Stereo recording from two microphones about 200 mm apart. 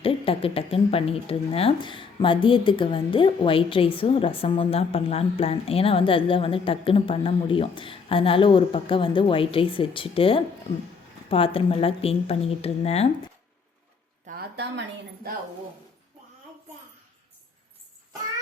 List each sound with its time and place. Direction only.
0.0 s speech: 30° left (ahead or behind)
14.3 s a woman's voice: 50° right (ahead or behind)